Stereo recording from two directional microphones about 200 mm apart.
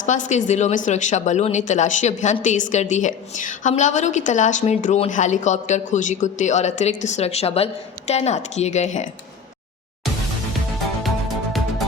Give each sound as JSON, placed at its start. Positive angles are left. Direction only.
{"t": 0.0, "sound": "a woman's voice", "side_deg": 40}